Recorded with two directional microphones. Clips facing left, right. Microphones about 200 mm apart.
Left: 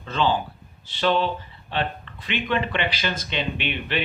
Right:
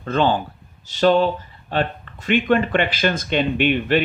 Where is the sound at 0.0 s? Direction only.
50° right (ahead or behind).